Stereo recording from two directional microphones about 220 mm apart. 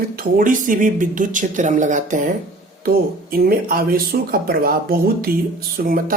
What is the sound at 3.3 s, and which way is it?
Speech, 40° right (ahead or behind).